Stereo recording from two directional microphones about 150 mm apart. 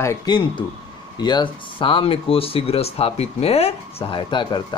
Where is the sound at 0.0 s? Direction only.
25° left (ahead or behind).